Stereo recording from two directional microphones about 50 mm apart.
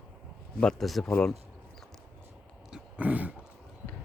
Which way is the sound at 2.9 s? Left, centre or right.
Right.